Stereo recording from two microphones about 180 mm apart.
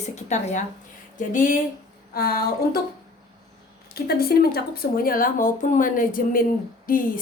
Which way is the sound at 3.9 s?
60° left (ahead or behind).